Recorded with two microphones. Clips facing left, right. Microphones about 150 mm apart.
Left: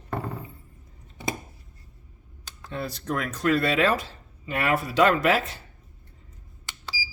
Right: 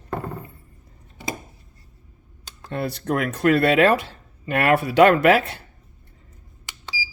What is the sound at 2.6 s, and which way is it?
Speech, 60° right (ahead or behind).